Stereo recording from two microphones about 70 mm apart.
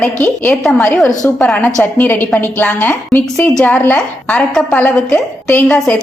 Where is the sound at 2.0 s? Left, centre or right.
Left.